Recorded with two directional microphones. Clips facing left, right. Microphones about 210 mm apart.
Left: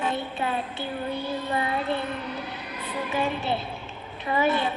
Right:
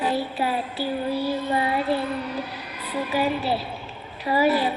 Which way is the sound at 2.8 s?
35° right (ahead or behind).